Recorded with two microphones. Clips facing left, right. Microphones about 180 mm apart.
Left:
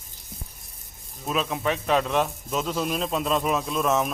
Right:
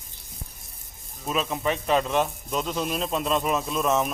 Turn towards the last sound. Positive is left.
turn(degrees=0)  # may be behind; listen again after turning